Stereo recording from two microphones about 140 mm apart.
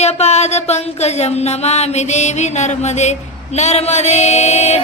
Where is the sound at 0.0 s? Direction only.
50° left (ahead or behind).